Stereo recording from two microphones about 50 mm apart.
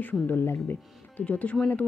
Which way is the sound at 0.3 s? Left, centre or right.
Left.